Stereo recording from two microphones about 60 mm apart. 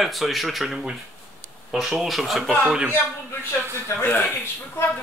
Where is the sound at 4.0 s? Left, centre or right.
Left.